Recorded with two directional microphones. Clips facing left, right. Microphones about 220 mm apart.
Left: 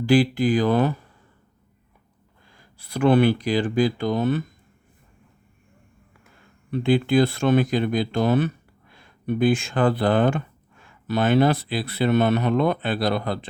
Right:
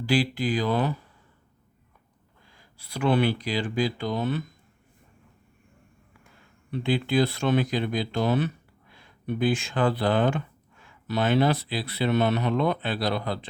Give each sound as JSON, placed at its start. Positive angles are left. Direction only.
{"t": 0.0, "sound": "speech", "side_deg": 50}
{"t": 2.5, "sound": "speech", "side_deg": 50}
{"t": 6.7, "sound": "speech", "side_deg": 50}